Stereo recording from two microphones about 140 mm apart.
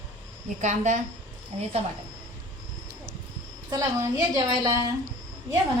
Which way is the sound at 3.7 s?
30° right (ahead or behind).